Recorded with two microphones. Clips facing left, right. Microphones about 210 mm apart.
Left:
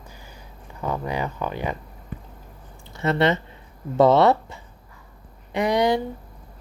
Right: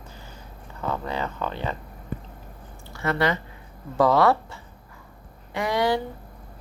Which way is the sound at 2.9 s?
20° left (ahead or behind).